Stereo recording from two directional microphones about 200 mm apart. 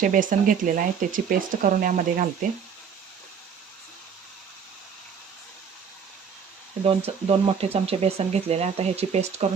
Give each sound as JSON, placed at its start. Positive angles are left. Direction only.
{"t": 0.0, "sound": "speech", "side_deg": -40}
{"t": 6.8, "sound": "speech", "side_deg": -30}